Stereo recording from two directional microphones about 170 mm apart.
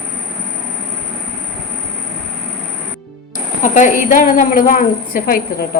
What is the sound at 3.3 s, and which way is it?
A woman's voice, 50° left (ahead or behind).